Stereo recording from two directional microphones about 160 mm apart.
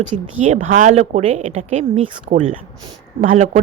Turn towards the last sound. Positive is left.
turn(degrees=-60)  # may be behind; listen again after turning